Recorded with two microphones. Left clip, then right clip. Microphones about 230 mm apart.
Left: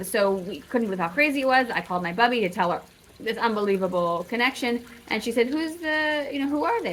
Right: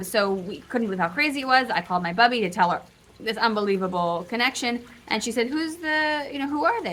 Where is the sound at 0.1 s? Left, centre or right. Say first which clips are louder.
Left 1 dB; centre.